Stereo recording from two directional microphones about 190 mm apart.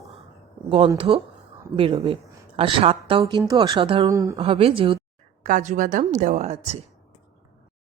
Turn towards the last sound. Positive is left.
turn(degrees=-35)  # may be behind; listen again after turning